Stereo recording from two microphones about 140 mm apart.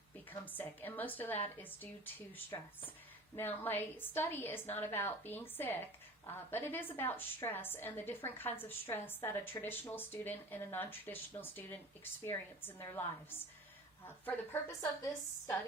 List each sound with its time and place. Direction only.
0.3 s a woman's voice: 15° left (ahead or behind)
2.5 s speech: 25° left (ahead or behind)
3.3 s a woman's voice: 15° left (ahead or behind)